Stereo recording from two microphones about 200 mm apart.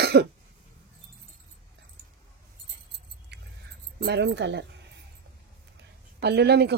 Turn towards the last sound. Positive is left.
turn(degrees=-55)  # may be behind; listen again after turning